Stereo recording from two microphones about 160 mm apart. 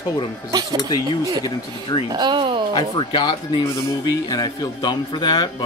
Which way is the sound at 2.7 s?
30° left (ahead or behind).